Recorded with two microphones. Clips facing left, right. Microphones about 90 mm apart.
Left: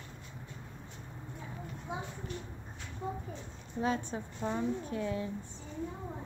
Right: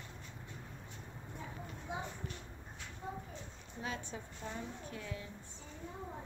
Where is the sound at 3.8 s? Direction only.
35° left (ahead or behind).